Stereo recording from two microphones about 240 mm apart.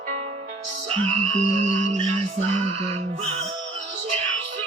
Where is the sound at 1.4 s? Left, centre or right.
Right.